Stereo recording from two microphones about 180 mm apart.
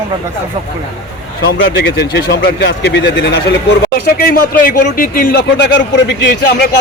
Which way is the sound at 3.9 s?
55° left (ahead or behind).